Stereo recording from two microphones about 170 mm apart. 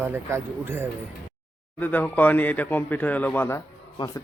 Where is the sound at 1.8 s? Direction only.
10° left (ahead or behind).